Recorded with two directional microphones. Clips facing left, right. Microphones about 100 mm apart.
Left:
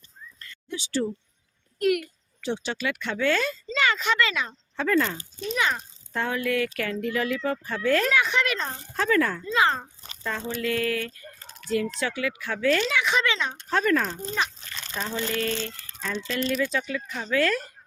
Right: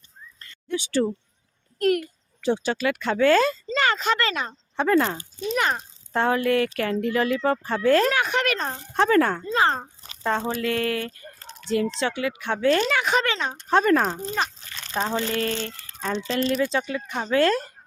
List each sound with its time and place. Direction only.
0.7 s speech: 55° right (ahead or behind)
1.8 s speech: 40° right (ahead or behind)
4.8 s speech: 30° right (ahead or behind)
5.5 s speech: 50° right (ahead or behind)
6.1 s speech: 35° right (ahead or behind)
8.1 s speech: 50° right (ahead or behind)
9.0 s speech: 40° right (ahead or behind); by 12.5 s 25° right (ahead or behind)
12.5 s speech: 35° right (ahead or behind)
12.9 s speech: 50° right (ahead or behind); by 17.6 s 30° right (ahead or behind)